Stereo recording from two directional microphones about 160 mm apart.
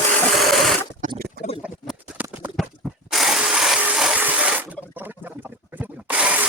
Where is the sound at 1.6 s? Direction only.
5° right (ahead or behind).